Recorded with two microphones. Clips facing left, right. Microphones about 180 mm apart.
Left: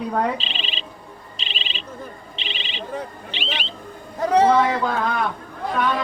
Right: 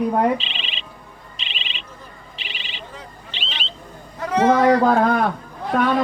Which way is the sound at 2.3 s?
25° left (ahead or behind).